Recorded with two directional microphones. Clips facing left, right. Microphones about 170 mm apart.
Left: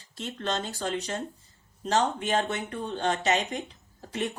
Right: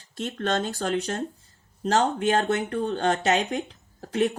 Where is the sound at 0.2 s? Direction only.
55° right (ahead or behind).